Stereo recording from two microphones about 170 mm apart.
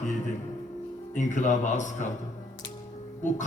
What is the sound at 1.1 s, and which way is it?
Speech, 45° left (ahead or behind).